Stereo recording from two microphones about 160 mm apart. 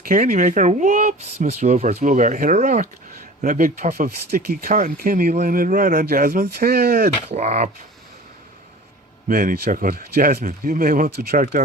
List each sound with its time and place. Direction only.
0.0 s speech: 60° right (ahead or behind)
7.3 s speech: 45° right (ahead or behind)
9.3 s speech: 60° right (ahead or behind)